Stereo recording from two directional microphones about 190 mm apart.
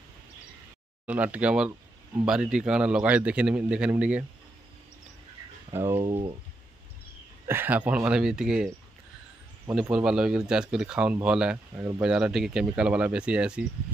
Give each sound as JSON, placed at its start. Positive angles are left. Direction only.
{"t": 1.0, "sound": "a man's voice", "side_deg": -10}
{"t": 5.7, "sound": "speech", "side_deg": -15}
{"t": 5.9, "sound": "speech", "side_deg": -30}
{"t": 7.4, "sound": "a man's voice", "side_deg": -10}
{"t": 9.7, "sound": "a man's voice", "side_deg": -5}
{"t": 12.0, "sound": "speech", "side_deg": -5}